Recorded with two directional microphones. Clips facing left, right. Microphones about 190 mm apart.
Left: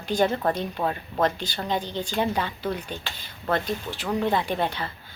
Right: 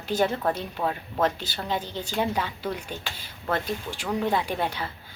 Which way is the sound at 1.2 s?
5° right (ahead or behind).